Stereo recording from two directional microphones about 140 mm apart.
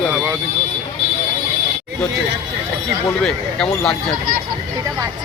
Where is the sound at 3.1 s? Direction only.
5° left (ahead or behind).